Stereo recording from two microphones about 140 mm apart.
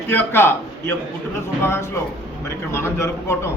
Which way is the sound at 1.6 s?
20° left (ahead or behind).